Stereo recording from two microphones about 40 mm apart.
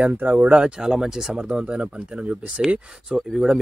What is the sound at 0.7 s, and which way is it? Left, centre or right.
Speech, centre.